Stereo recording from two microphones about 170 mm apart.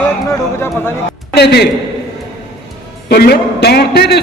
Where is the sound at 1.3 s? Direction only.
75° left (ahead or behind).